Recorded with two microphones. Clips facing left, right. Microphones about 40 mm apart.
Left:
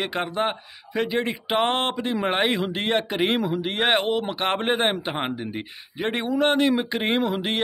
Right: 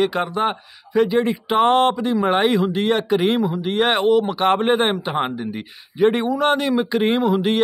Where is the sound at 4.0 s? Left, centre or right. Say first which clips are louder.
Right 8 dB; left.